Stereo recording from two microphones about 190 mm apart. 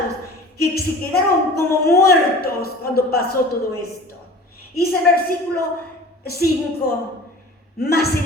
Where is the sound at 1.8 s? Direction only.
55° left (ahead or behind).